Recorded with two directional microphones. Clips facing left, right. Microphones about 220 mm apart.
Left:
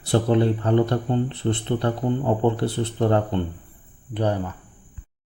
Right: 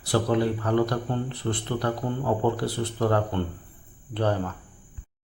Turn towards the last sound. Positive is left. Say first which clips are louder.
# left 2 dB
turn(degrees=15)  # may be behind; listen again after turning